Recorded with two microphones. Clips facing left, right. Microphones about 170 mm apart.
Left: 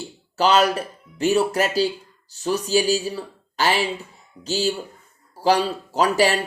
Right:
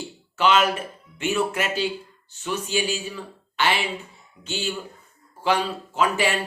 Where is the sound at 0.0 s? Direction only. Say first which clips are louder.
Left 2 dB; 40° left (ahead or behind).